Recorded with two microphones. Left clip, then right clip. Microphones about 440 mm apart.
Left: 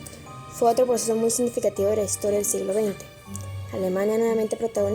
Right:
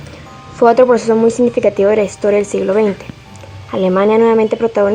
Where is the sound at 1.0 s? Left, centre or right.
Left.